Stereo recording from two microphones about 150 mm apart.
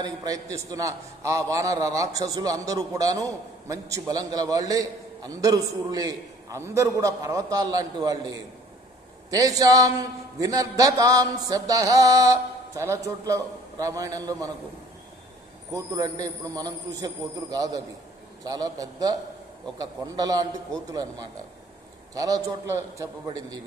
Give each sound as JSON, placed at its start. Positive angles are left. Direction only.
{"t": 0.0, "sound": "a man's voice", "side_deg": -25}
{"t": 15.7, "sound": "a man's voice", "side_deg": -20}